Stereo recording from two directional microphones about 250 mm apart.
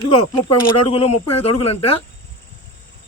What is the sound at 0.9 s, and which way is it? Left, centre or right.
Speech, left.